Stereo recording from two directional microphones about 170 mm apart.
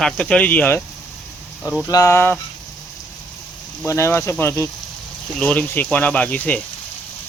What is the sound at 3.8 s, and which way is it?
Speech, 15° left (ahead or behind).